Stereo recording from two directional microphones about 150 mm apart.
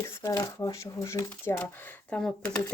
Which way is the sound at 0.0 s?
20° left (ahead or behind).